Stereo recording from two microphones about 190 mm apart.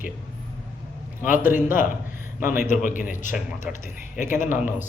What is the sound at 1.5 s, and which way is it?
Speech, 45° left (ahead or behind).